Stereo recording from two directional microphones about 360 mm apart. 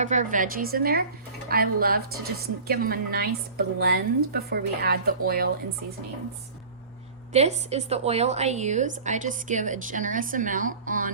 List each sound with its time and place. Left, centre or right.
0.0 s a woman's voice: centre
7.3 s a woman's voice: centre